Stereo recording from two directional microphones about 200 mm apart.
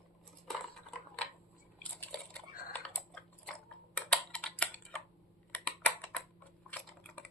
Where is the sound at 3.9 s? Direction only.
5° left (ahead or behind).